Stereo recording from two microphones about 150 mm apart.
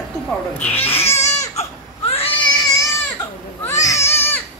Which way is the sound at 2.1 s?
40° left (ahead or behind).